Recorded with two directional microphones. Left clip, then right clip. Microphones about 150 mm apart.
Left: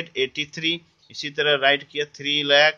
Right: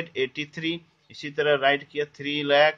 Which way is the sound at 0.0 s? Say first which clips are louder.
Left 3 dB; 5° left (ahead or behind).